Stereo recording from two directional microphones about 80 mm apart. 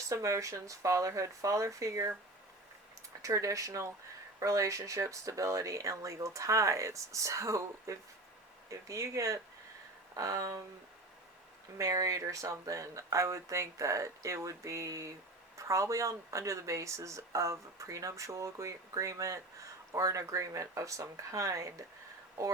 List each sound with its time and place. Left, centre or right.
0.1 s speech: right
3.2 s speech: right
11.8 s speech: right